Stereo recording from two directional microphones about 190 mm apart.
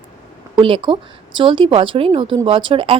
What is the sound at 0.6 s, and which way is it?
Speech, 25° right (ahead or behind).